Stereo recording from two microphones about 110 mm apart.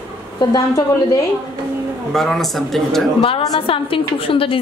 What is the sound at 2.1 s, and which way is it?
Speech, 5° left (ahead or behind).